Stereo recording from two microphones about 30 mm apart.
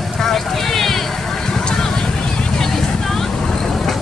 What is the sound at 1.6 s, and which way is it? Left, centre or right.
Vehicle, left.